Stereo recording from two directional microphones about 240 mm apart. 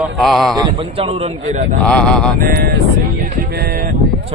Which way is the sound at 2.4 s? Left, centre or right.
Right.